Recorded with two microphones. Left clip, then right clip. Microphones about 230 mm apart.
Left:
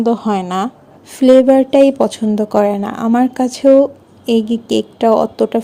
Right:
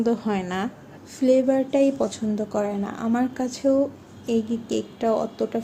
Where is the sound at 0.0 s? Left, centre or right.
Left.